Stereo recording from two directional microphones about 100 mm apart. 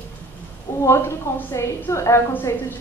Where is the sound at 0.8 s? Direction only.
25° left (ahead or behind).